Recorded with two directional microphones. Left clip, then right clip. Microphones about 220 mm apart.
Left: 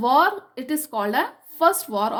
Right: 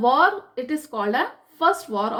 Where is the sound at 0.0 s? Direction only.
50° left (ahead or behind).